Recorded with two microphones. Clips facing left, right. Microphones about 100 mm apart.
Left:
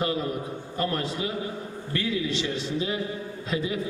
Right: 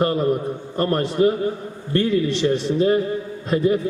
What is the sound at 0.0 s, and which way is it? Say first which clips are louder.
A man's voice: right 8 dB; 50° right (ahead or behind).